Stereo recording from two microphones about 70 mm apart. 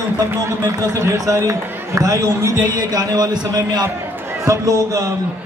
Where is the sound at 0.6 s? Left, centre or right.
Right.